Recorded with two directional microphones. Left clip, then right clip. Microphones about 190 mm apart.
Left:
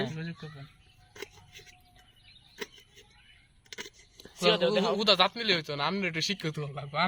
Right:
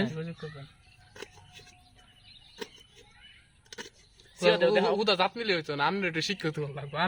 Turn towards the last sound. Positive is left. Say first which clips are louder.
# left 1 dB
turn(degrees=5)  # may be behind; listen again after turning